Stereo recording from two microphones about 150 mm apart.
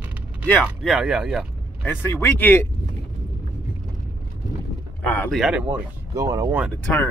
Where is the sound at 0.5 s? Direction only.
Centre (ahead or behind).